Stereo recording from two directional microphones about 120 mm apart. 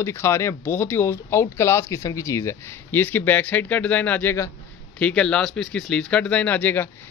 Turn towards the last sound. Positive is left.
turn(degrees=15)  # may be behind; listen again after turning